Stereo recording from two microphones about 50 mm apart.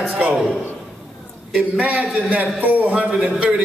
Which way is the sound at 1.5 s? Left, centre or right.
Right.